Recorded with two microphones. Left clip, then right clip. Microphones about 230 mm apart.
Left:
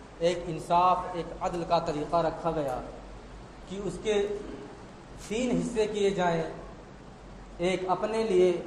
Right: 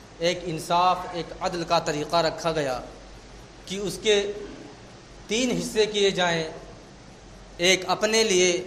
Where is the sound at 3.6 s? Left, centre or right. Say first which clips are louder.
Right 7 dB; right.